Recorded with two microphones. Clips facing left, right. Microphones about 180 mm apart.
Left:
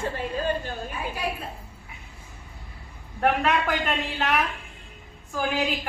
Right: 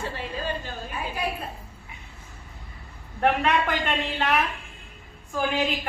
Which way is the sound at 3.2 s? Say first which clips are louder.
Even; centre (ahead or behind).